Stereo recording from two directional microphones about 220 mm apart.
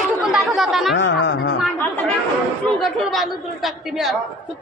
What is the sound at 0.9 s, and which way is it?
Speech, 55° left (ahead or behind).